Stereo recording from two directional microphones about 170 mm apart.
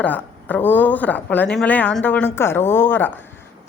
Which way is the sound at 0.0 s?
10° left (ahead or behind).